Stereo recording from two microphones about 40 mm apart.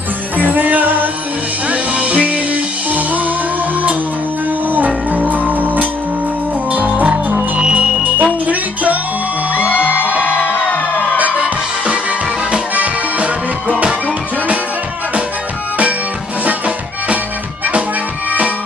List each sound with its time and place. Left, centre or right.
0.4 s music: right
1.7 s music: right
4.6 s music: right
9.7 s music: left
11.3 s music: right
16.4 s music: right